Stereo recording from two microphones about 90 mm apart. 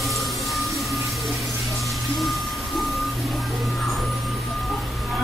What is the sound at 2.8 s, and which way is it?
Music, centre (ahead or behind).